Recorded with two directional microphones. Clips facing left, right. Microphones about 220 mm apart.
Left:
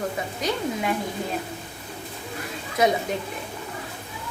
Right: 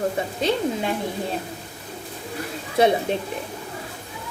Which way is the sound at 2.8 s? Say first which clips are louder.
Right 3 dB; 30° right (ahead or behind).